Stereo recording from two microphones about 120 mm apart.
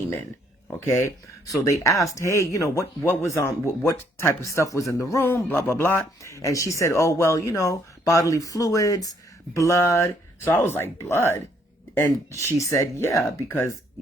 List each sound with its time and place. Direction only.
0.8 s speech: 25° left (ahead or behind)